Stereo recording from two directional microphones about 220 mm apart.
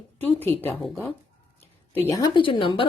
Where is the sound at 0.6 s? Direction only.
5° left (ahead or behind).